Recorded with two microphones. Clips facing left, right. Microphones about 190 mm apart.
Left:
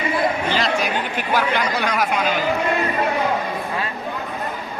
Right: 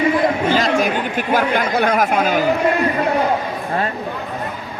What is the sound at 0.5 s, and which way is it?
Speech, 45° right (ahead or behind).